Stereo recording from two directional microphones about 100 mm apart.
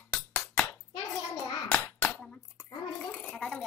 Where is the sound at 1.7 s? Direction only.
10° left (ahead or behind).